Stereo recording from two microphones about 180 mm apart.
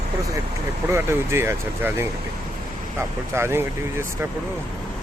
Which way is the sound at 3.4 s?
15° right (ahead or behind).